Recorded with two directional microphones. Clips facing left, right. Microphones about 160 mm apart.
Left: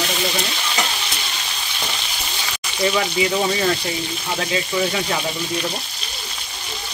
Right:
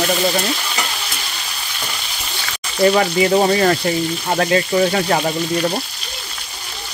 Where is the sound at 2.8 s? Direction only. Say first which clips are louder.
Right 6 dB; 55° right (ahead or behind).